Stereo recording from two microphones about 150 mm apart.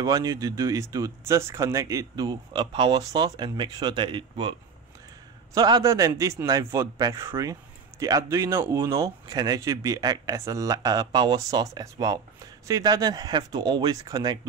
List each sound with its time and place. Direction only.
0.0 s speech: 25° right (ahead or behind)